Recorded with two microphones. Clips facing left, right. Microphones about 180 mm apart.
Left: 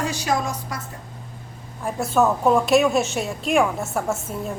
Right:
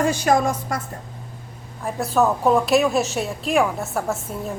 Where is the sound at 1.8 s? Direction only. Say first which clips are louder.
Even; centre (ahead or behind).